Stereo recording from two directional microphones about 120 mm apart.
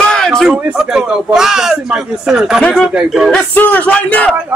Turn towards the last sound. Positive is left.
turn(degrees=10)  # may be behind; listen again after turning